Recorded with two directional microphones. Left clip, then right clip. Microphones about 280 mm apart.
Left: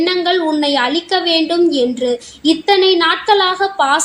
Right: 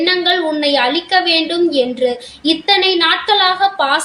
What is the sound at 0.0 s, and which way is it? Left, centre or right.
A woman's voice, left.